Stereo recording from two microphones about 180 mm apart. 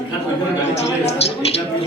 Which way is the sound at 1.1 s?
35° left (ahead or behind).